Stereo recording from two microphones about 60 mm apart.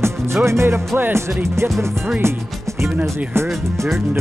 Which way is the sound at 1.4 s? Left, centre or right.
Right.